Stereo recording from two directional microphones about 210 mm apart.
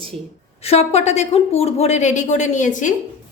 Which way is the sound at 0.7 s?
30° left (ahead or behind).